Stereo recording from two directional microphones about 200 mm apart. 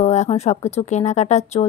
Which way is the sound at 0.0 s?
35° left (ahead or behind).